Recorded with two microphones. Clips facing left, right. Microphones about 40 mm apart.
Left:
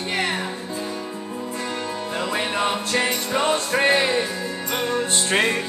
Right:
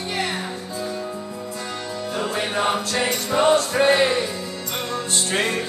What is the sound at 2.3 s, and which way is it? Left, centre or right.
Music, left.